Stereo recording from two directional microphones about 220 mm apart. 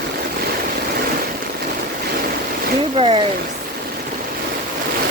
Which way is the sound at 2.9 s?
25° right (ahead or behind).